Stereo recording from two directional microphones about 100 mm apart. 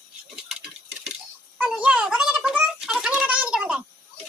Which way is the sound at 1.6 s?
10° right (ahead or behind).